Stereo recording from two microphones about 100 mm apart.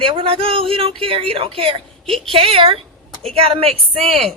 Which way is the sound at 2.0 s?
Centre (ahead or behind).